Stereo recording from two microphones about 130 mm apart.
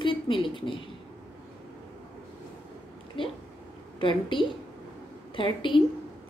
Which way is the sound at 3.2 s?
40° left (ahead or behind).